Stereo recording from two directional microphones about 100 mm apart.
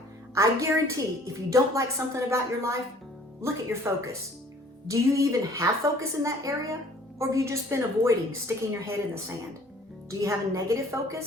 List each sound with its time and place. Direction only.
0.4 s a woman's voice: 30° right (ahead or behind)